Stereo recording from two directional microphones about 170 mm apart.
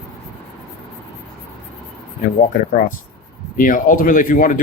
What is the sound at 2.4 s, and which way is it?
Speech, 50° left (ahead or behind).